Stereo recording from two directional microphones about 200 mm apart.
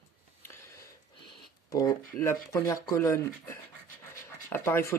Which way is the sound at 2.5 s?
15° left (ahead or behind).